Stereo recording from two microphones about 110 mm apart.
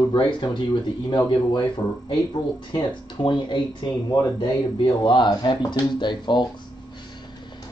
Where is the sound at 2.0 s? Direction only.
45° left (ahead or behind).